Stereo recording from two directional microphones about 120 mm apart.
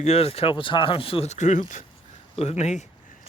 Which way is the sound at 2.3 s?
65° left (ahead or behind).